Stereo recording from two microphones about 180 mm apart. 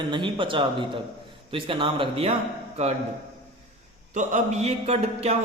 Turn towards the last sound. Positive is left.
turn(degrees=-35)  # may be behind; listen again after turning